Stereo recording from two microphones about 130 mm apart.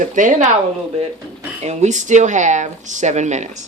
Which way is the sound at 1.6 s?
55° right (ahead or behind).